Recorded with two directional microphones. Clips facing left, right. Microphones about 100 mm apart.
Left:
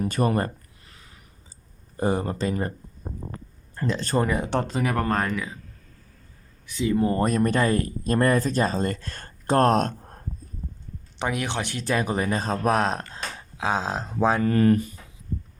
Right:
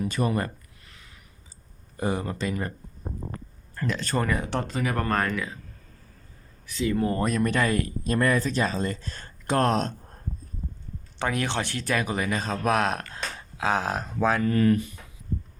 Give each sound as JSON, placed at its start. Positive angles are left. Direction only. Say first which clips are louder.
{"t": 0.0, "sound": "a sound", "louder": "left 3 dB", "side_deg": 45}
{"t": 2.0, "sound": "speech", "louder": "left 3 dB", "side_deg": 35}
{"t": 3.8, "sound": "speech", "louder": "left 3 dB", "side_deg": 25}
{"t": 6.7, "sound": "speech", "louder": "left 2 dB", "side_deg": 20}
{"t": 7.2, "sound": "speech", "louder": "left 3 dB", "side_deg": 40}
{"t": 8.9, "sound": "speech", "louder": "left 2 dB", "side_deg": 60}
{"t": 9.5, "sound": "speech", "louder": "left 4 dB", "side_deg": 40}
{"t": 11.2, "sound": "speech", "louder": "even", "side_deg": 15}
{"t": 13.6, "sound": "speech", "louder": "even", "side_deg": 15}
{"t": 14.5, "sound": "speech", "louder": "left 2 dB", "side_deg": 40}